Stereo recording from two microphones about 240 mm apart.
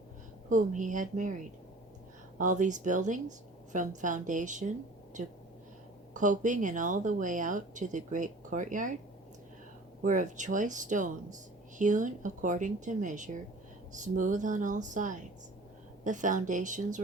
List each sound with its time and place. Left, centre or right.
0.5 s speech: right
2.4 s speech: right
6.1 s speech: right
10.0 s speech: right